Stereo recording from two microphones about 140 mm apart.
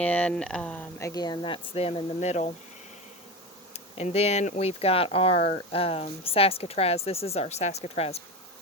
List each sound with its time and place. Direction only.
0.0 s speech: 10° left (ahead or behind)
0.9 s speech: 25° left (ahead or behind); by 2.5 s 50° left (ahead or behind)
3.7 s speech: 50° left (ahead or behind)